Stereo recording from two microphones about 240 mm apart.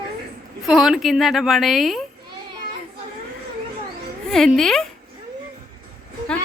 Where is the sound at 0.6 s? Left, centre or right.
Centre.